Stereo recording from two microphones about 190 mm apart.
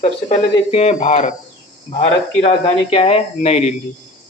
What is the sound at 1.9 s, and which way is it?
Speech, 30° left (ahead or behind).